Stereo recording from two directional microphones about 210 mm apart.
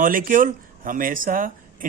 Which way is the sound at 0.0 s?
40° right (ahead or behind).